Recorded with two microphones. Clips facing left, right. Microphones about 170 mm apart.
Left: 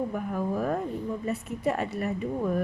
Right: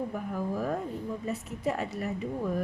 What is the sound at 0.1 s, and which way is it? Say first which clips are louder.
A woman's voice: left 3 dB; 55° left (ahead or behind).